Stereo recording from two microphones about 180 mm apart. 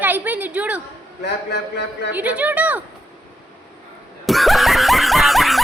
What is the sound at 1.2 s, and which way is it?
Speech, 70° left (ahead or behind).